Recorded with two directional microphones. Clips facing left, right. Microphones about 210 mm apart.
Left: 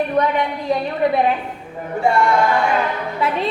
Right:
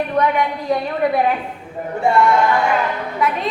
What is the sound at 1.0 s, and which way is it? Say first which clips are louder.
Speech: left 1 dB; 25° left (ahead or behind).